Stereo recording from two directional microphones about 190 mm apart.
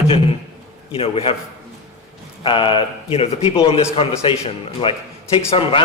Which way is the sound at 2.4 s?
25° left (ahead or behind).